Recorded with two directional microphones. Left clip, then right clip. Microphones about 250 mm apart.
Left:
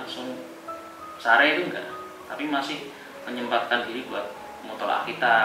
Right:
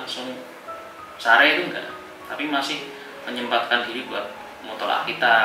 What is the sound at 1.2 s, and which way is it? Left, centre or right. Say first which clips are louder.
A man's voice: right 3 dB; centre.